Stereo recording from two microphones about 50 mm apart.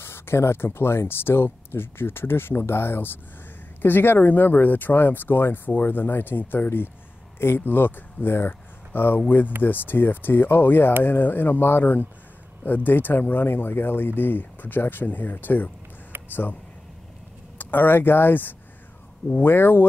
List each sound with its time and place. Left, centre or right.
0.0 s speech: left
16.1 s a sound: right
17.6 s speech: left